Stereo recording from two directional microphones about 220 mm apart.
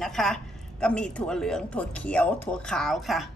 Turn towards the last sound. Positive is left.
turn(degrees=0)  # may be behind; listen again after turning